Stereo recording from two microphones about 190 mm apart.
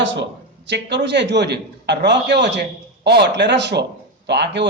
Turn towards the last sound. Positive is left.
turn(degrees=-65)  # may be behind; listen again after turning